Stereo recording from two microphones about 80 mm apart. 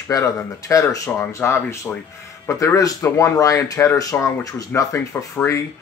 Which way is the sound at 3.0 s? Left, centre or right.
Left.